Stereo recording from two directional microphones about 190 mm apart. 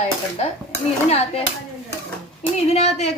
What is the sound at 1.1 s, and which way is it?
Speech, 30° left (ahead or behind).